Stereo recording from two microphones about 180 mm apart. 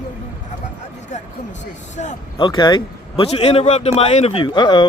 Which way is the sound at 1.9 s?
40° left (ahead or behind).